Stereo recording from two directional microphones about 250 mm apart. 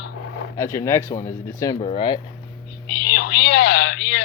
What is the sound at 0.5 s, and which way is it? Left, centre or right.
Speech, centre.